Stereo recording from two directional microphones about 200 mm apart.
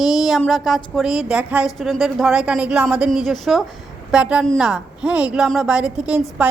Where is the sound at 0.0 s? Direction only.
Centre (ahead or behind).